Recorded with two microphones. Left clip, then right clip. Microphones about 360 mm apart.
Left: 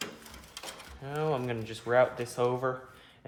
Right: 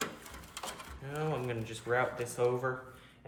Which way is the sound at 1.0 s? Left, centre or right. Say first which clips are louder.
Left 5 dB; left.